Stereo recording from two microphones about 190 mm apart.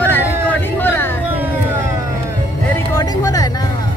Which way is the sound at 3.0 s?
20° left (ahead or behind).